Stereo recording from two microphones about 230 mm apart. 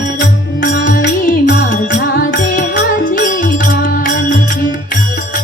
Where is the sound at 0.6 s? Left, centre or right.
Left.